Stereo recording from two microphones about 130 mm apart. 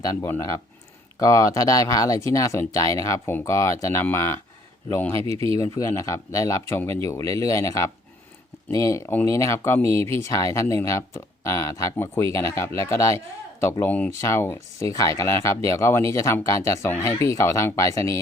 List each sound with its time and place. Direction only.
0.0 s speech: 25° left (ahead or behind)
5.2 s speech: 45° right (ahead or behind)
5.5 s speech: 25° left (ahead or behind)